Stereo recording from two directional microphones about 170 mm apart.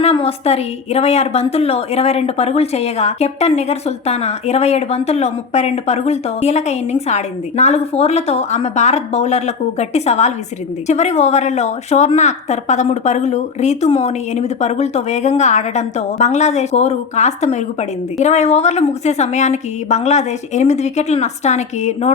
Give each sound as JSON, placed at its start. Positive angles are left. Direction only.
{"t": 0.0, "sound": "a woman's voice", "side_deg": 35}